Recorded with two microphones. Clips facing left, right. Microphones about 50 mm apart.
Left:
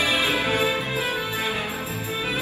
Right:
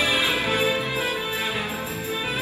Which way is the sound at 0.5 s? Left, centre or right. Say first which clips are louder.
Even; left.